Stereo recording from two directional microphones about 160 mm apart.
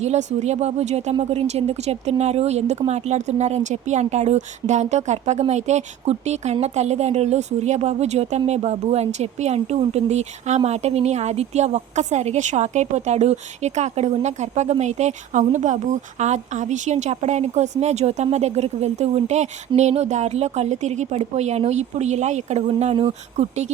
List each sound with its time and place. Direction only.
0.0 s speech: 45° right (ahead or behind)